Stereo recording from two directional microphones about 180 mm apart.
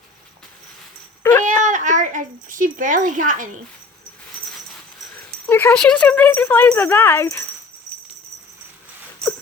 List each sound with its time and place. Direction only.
1.2 s a sound: 15° left (ahead or behind)
1.6 s a child's voice: 45° right (ahead or behind)
5.5 s speech: 10° left (ahead or behind)